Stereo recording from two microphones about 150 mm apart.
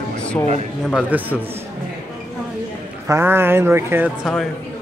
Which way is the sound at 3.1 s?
15° right (ahead or behind).